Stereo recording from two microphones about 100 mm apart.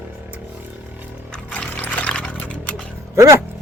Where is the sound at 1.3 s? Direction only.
10° left (ahead or behind).